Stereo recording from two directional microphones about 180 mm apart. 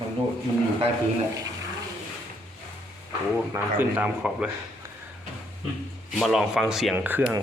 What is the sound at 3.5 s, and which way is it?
Speech, 10° right (ahead or behind).